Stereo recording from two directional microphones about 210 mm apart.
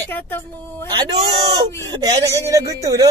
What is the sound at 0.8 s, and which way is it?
Speech, 20° right (ahead or behind).